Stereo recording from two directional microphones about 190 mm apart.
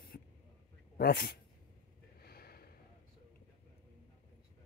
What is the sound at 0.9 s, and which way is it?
Speech, 50° left (ahead or behind).